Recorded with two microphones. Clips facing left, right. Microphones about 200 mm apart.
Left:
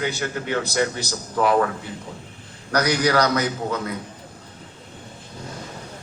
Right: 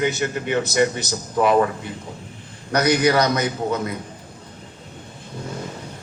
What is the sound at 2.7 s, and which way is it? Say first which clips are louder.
A man's voice: right 2 dB; 20° right (ahead or behind).